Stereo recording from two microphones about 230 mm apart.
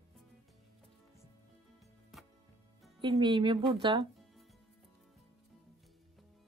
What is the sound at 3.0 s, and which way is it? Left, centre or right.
Speech, centre.